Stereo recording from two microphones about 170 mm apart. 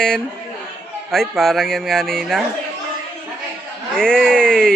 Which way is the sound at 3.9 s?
5° left (ahead or behind).